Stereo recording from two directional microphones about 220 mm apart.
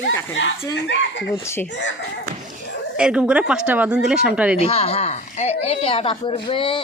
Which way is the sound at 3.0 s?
5° right (ahead or behind).